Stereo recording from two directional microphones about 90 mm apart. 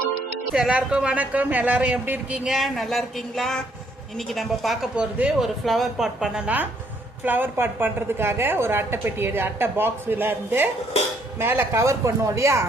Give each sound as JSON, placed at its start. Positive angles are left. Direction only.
{"t": 0.5, "sound": "a man's voice", "side_deg": -10}
{"t": 2.5, "sound": "a woman's voice", "side_deg": 0}